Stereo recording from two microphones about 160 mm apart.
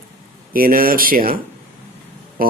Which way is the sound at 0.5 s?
65° right (ahead or behind).